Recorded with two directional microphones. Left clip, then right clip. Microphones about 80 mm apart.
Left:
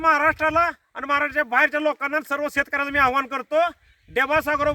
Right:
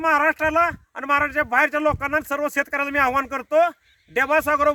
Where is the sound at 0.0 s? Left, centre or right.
Centre.